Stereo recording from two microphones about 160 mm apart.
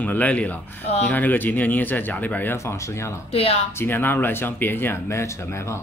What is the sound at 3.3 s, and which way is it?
Speech, 40° left (ahead or behind).